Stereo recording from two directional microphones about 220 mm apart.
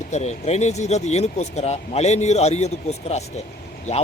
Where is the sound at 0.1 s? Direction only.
30° left (ahead or behind).